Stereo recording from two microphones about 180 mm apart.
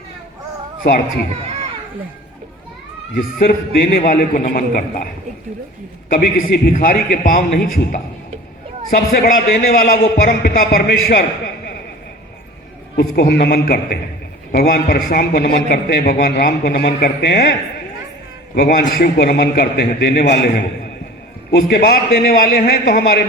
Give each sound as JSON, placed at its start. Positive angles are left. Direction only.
{"t": 0.9, "sound": "a man's voice", "side_deg": 55}
{"t": 1.5, "sound": "a sound", "side_deg": -35}
{"t": 3.2, "sound": "a man's voice", "side_deg": 50}
{"t": 6.1, "sound": "a man's voice", "side_deg": 50}
{"t": 9.0, "sound": "a man's voice", "side_deg": 55}
{"t": 13.0, "sound": "a man's voice", "side_deg": 65}
{"t": 18.5, "sound": "a man's voice", "side_deg": 55}